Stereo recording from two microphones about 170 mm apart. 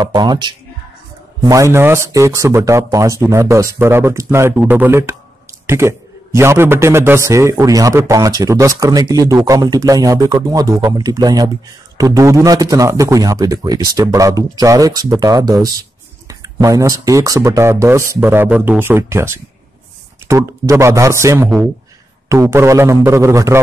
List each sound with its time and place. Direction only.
0.0 s a man's voice: 25° right (ahead or behind)